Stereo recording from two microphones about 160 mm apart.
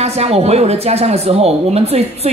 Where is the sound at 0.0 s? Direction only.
40° right (ahead or behind).